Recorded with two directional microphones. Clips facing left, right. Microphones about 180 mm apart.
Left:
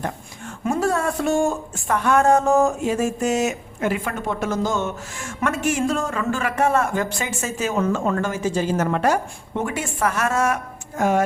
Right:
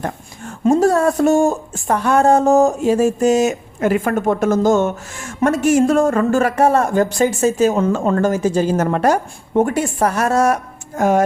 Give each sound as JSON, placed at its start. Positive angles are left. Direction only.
{"t": 0.7, "sound": "speech", "side_deg": -40}